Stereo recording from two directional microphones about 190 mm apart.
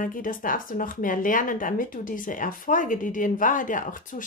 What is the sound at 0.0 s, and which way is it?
Speech, 45° left (ahead or behind).